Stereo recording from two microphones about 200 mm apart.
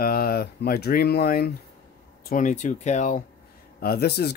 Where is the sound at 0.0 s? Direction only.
50° left (ahead or behind).